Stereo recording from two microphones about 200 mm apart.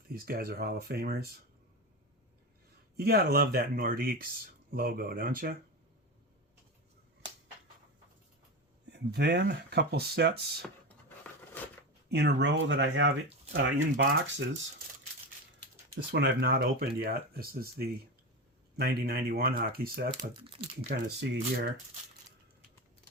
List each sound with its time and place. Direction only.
0.1 s speech: 50° right (ahead or behind)
3.0 s speech: 50° right (ahead or behind)
8.9 s speech: 55° right (ahead or behind)
10.6 s a sound: 10° left (ahead or behind)
12.1 s speech: 60° right (ahead or behind)
16.1 s speech: 55° right (ahead or behind)
20.3 s speech: 25° right (ahead or behind)
20.9 s speech: 60° right (ahead or behind)